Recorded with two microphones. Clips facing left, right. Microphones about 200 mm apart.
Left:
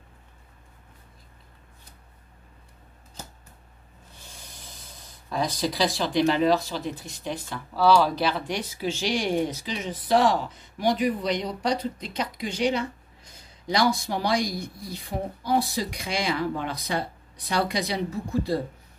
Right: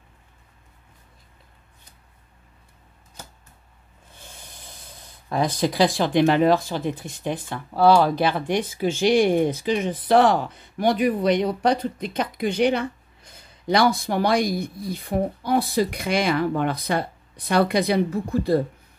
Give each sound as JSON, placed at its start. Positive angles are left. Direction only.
{"t": 5.3, "sound": "speech", "side_deg": -55}